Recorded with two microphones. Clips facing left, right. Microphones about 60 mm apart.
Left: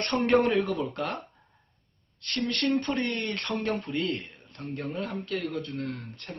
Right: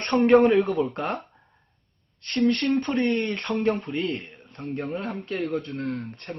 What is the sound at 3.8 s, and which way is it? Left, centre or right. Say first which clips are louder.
A man's voice: right 2 dB; right.